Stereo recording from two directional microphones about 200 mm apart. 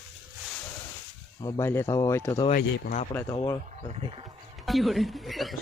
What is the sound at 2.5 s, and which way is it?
Speech, 45° left (ahead or behind).